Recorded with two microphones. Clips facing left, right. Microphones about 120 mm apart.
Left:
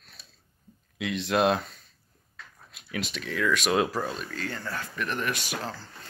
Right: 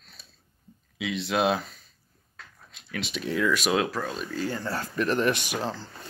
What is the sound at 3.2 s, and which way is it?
Speech, 20° right (ahead or behind).